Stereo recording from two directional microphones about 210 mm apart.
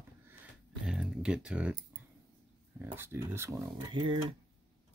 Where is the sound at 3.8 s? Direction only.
20° right (ahead or behind).